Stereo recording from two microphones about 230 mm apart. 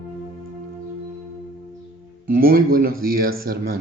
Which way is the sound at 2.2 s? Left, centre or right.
Right.